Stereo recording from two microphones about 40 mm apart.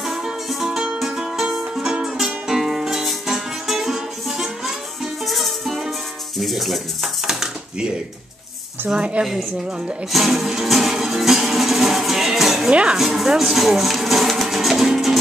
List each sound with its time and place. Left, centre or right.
0.0 s music: centre
7.2 s dishes: centre
8.9 s a woman's voice: right
10.1 s music: centre
12.6 s speech: right
12.9 s speech: centre